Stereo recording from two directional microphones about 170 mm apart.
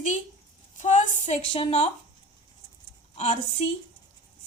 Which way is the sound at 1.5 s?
35° left (ahead or behind).